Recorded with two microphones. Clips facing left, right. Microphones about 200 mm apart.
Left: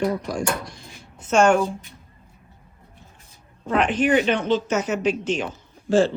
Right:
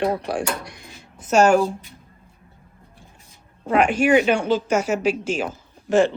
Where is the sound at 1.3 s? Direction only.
5° right (ahead or behind).